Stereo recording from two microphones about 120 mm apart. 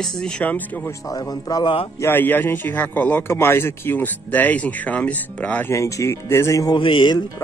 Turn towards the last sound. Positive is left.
turn(degrees=35)  # may be behind; listen again after turning